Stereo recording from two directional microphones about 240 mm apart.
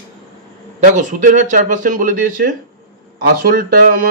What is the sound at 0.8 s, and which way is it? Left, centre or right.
Speech, right.